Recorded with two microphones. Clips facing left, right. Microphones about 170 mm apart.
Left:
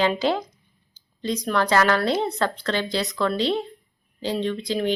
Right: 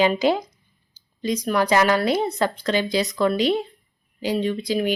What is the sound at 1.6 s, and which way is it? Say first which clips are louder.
A woman's voice: right 1 dB; 15° right (ahead or behind).